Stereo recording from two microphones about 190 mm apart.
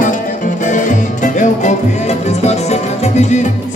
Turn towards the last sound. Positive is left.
turn(degrees=35)  # may be behind; listen again after turning